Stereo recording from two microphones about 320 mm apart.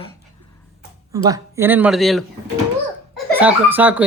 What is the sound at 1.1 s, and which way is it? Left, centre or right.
Speech, centre.